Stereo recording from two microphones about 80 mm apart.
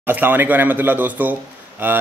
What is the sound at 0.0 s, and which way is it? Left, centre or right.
A man's voice, right.